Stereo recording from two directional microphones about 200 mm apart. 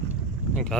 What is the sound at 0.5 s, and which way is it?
Speech, 5° left (ahead or behind).